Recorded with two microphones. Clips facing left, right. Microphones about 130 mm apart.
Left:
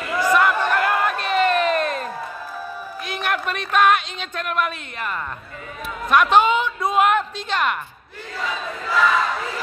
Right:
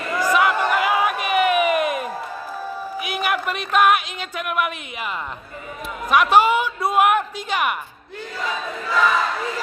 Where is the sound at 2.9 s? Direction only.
10° right (ahead or behind).